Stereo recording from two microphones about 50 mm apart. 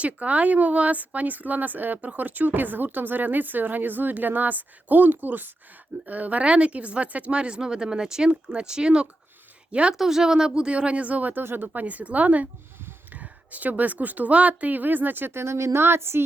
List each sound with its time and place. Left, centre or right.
0.0 s a woman's voice: right
15.4 s speech: right